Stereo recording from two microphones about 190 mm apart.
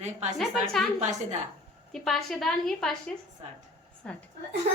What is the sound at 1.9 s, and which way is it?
A woman's voice, centre (ahead or behind).